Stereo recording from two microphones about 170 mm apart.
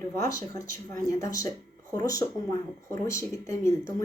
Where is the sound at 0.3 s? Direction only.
20° left (ahead or behind).